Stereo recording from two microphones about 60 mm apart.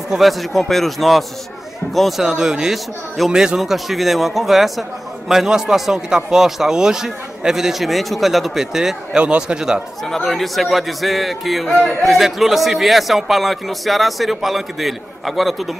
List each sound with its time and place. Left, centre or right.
0.1 s a man's voice: centre
9.2 s a man's voice: centre
10.0 s a man's voice: centre